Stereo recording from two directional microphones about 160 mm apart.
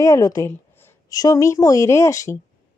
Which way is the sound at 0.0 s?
20° left (ahead or behind).